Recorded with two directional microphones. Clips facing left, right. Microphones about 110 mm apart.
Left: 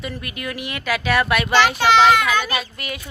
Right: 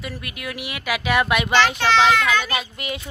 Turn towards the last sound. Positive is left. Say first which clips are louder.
# even
turn(degrees=-20)  # may be behind; listen again after turning